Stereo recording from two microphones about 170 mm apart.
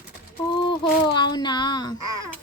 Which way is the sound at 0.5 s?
30° left (ahead or behind).